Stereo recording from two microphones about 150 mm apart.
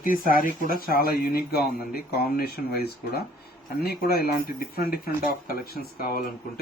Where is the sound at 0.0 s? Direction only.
70° left (ahead or behind).